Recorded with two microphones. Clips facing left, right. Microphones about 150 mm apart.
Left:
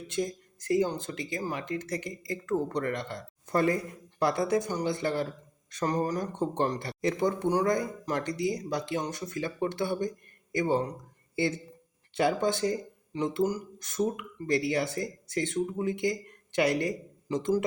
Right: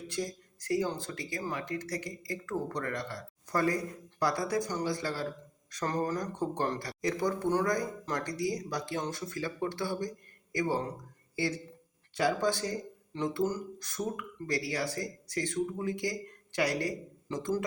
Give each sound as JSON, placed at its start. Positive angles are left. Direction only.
{"t": 0.1, "sound": "speech", "side_deg": 20}